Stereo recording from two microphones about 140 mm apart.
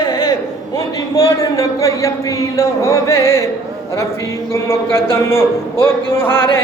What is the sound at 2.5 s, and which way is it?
Music, 20° left (ahead or behind).